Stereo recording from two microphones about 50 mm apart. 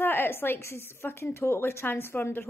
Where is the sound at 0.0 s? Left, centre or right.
Left.